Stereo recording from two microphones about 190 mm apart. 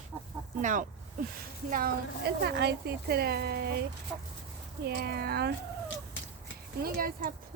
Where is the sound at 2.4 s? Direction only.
60° right (ahead or behind).